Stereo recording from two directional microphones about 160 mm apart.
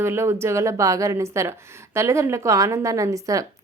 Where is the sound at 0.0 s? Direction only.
15° right (ahead or behind).